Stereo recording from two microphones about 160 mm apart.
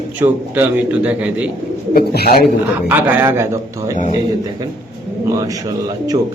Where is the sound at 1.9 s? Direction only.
75° left (ahead or behind).